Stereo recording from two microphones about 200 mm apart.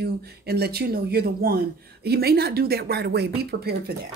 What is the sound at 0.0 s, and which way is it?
A woman's voice, 50° right (ahead or behind).